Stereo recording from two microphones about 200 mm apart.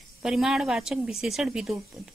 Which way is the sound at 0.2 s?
Centre (ahead or behind).